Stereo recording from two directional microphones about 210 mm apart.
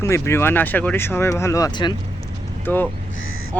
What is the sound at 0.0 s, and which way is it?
Speech, 15° left (ahead or behind).